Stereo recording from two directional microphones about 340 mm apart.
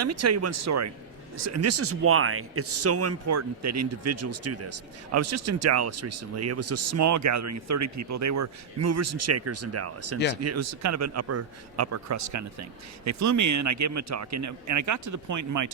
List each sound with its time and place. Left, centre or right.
0.0 s speech: right